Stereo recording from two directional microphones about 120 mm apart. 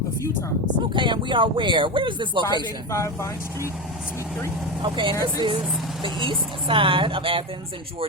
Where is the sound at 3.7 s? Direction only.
5° right (ahead or behind).